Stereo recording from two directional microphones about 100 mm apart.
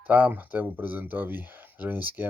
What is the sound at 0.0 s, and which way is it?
Speech, 15° right (ahead or behind).